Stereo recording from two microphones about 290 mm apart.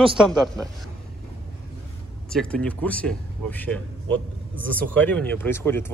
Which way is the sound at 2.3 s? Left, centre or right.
Centre.